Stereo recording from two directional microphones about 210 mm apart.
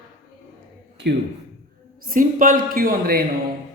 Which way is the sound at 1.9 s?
40° right (ahead or behind).